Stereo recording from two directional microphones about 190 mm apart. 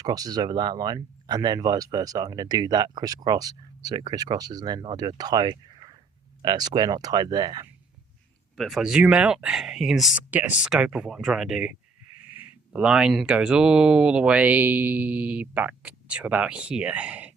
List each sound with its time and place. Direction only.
0.0 s speech: 20° right (ahead or behind)
8.5 s speech: centre (ahead or behind)